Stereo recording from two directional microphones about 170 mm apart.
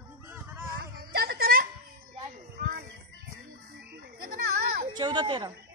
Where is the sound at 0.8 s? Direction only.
70° right (ahead or behind).